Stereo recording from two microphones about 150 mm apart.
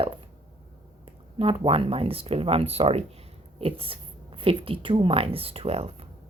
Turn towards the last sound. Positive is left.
turn(degrees=-40)  # may be behind; listen again after turning